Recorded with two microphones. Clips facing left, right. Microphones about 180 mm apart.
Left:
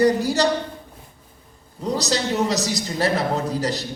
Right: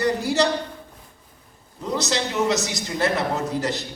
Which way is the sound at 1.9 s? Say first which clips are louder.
Left 1 dB; 35° left (ahead or behind).